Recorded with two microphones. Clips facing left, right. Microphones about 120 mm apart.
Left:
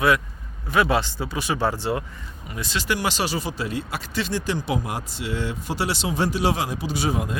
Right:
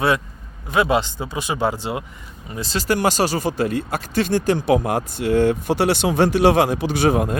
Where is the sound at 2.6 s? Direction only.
35° right (ahead or behind).